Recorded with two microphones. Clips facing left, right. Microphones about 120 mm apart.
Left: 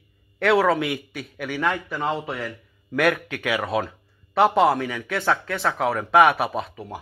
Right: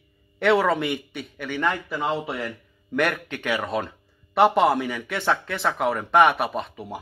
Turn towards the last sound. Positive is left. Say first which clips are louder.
# left 1 dB
turn(degrees=0)  # may be behind; listen again after turning